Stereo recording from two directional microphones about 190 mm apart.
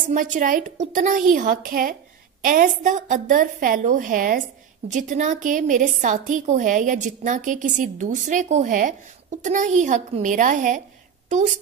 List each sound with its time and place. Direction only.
0.0 s a woman's voice: 40° right (ahead or behind)